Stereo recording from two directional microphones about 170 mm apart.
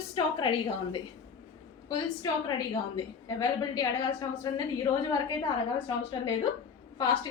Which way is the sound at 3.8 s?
25° left (ahead or behind).